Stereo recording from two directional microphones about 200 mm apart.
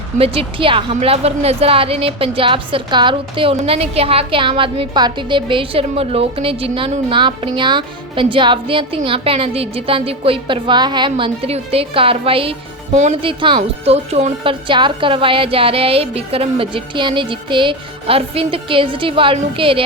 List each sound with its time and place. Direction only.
0.2 s a woman's voice: 30° right (ahead or behind)